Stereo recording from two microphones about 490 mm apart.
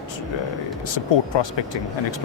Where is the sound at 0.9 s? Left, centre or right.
Left.